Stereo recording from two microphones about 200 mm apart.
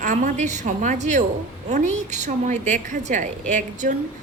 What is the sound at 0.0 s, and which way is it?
A woman's voice, 40° right (ahead or behind).